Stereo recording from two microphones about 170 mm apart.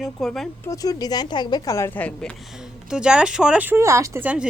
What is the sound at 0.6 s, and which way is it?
A woman's voice, 20° left (ahead or behind).